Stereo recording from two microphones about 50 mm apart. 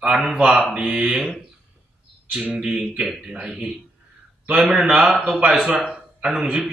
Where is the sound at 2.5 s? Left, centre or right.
Centre.